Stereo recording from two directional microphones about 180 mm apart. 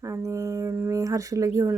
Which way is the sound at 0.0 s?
15° right (ahead or behind).